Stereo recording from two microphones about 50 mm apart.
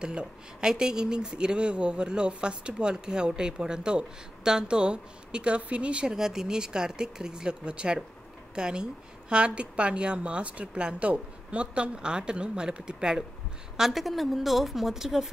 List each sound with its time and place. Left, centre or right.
0.0 s a woman's voice: centre
6.1 s a woman's voice: centre
13.7 s a woman's voice: centre